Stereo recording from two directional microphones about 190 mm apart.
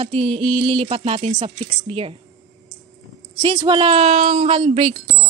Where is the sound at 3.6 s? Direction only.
25° right (ahead or behind).